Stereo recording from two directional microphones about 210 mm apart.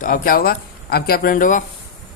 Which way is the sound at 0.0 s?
40° left (ahead or behind).